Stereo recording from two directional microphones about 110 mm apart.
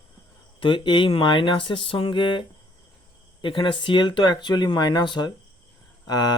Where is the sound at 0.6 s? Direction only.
45° left (ahead or behind).